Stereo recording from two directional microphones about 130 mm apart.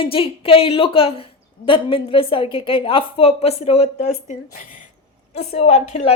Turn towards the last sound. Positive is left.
turn(degrees=60)  # may be behind; listen again after turning